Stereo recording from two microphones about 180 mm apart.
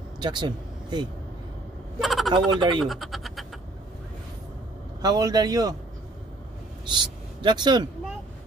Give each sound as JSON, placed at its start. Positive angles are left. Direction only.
{"t": 0.2, "sound": "speech", "side_deg": -25}
{"t": 2.0, "sound": "a man's voice", "side_deg": 0}
{"t": 2.3, "sound": "a man's voice", "side_deg": -25}
{"t": 2.8, "sound": "speech", "side_deg": 0}
{"t": 5.0, "sound": "a man's voice", "side_deg": -20}
{"t": 6.9, "sound": "speech", "side_deg": -25}